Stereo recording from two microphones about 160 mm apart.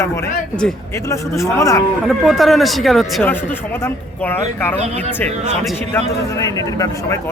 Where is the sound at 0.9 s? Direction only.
20° left (ahead or behind).